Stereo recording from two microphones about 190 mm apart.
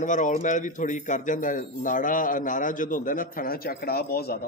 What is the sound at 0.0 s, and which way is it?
A man's voice, 40° left (ahead or behind).